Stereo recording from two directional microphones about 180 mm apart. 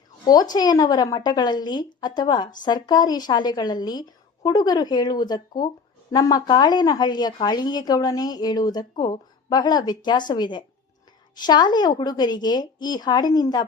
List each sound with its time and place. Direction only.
0.3 s speech: 20° left (ahead or behind)